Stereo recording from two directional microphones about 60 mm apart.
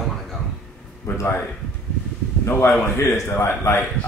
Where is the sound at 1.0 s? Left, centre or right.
Left.